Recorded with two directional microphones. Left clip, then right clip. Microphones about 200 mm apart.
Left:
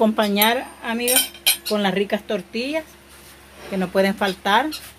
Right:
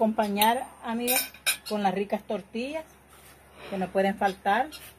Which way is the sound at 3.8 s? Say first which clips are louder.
Left 5 dB; 45° left (ahead or behind).